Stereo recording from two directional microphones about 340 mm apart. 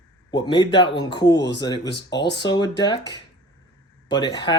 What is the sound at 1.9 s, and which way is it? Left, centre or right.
Speech, left.